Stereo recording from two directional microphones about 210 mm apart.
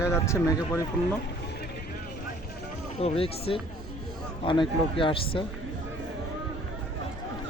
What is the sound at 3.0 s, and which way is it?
A man's voice, 25° left (ahead or behind).